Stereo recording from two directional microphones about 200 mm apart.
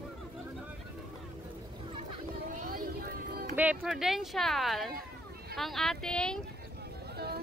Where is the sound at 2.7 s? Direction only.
45° right (ahead or behind).